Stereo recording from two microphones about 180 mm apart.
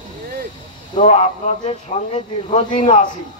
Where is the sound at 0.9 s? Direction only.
40° left (ahead or behind).